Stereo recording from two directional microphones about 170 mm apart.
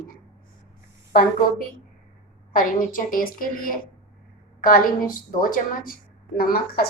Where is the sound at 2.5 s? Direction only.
55° left (ahead or behind).